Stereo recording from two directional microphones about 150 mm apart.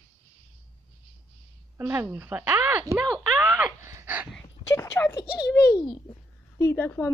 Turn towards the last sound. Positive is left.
turn(degrees=15)  # may be behind; listen again after turning